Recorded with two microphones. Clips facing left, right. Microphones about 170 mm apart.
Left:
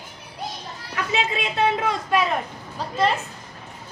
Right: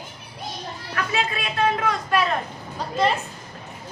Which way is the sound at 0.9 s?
20° left (ahead or behind).